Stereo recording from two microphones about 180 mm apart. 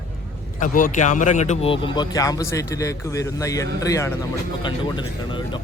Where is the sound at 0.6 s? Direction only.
50° left (ahead or behind).